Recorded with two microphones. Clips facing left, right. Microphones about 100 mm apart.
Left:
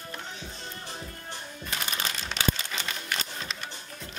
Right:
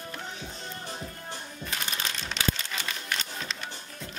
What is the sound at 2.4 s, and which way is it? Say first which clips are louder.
Crumpling: left 1 dB; 5° left (ahead or behind).